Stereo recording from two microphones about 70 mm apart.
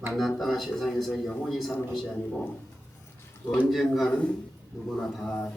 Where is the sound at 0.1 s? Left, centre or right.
Centre.